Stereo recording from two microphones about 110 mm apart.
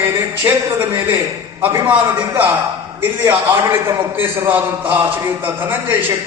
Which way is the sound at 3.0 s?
20° right (ahead or behind).